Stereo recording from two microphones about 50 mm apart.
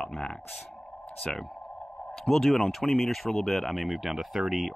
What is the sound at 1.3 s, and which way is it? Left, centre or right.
Speech, centre.